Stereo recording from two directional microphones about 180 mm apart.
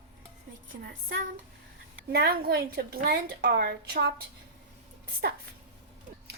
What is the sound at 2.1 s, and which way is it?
A woman's voice, 60° right (ahead or behind).